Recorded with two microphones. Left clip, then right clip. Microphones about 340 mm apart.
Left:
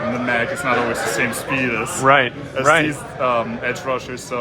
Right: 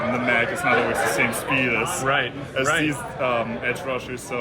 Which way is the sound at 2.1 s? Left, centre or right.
Centre.